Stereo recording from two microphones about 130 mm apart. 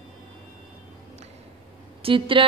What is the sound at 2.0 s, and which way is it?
Speech, 40° right (ahead or behind).